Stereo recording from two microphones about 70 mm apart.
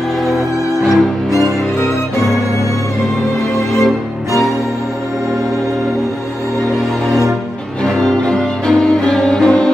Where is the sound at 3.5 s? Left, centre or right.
Centre.